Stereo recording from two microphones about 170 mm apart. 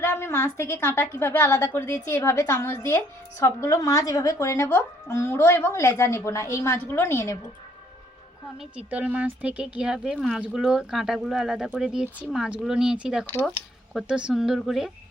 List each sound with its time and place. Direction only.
0.0 s a woman's voice: 15° left (ahead or behind)
8.7 s speech: 10° right (ahead or behind)